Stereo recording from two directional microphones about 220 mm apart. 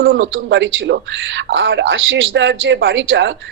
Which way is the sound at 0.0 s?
60° right (ahead or behind).